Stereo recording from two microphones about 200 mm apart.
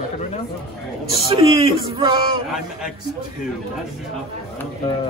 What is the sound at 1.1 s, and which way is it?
A man's voice, 30° right (ahead or behind).